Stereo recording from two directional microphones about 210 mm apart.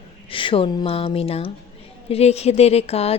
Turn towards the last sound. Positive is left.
turn(degrees=30)  # may be behind; listen again after turning